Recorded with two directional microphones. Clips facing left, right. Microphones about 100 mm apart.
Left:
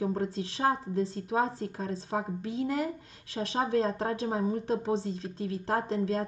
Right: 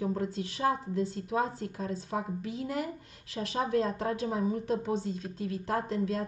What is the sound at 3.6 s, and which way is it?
A woman's voice, 35° left (ahead or behind).